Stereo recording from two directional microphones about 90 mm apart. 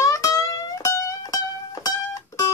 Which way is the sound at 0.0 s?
40° left (ahead or behind).